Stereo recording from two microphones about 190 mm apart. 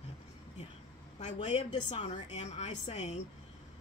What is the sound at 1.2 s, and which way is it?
Speech, 35° left (ahead or behind).